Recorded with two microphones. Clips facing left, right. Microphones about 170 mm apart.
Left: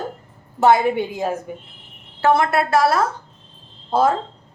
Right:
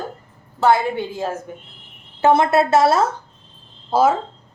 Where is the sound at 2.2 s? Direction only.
20° right (ahead or behind).